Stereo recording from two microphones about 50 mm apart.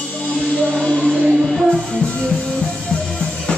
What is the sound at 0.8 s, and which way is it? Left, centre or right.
Music, centre.